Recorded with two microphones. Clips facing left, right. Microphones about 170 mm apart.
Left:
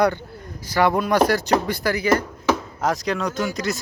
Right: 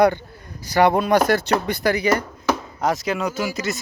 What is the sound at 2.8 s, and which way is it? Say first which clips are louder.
Speech: right 1 dB; 5° right (ahead or behind).